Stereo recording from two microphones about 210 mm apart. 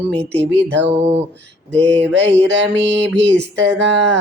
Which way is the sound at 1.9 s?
60° right (ahead or behind).